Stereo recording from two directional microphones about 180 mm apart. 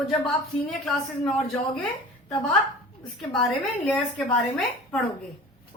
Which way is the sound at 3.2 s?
Centre (ahead or behind).